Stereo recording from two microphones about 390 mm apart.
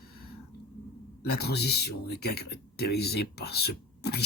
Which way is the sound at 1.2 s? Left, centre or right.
Left.